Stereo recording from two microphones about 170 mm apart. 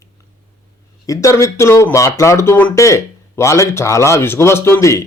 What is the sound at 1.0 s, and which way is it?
Speech, 20° left (ahead or behind).